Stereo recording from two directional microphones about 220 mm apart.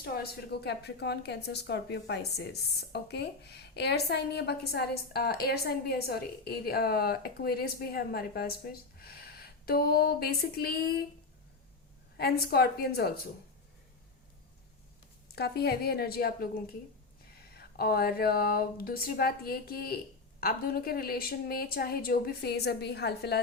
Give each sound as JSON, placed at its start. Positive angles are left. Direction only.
{"t": 0.0, "sound": "a woman's voice", "side_deg": 45}
{"t": 12.1, "sound": "a woman's voice", "side_deg": 45}
{"t": 15.4, "sound": "a woman's voice", "side_deg": 45}